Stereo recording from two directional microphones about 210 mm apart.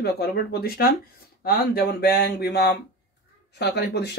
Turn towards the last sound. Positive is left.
turn(degrees=50)  # may be behind; listen again after turning